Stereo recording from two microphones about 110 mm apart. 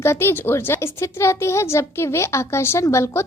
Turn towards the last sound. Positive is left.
turn(degrees=25)  # may be behind; listen again after turning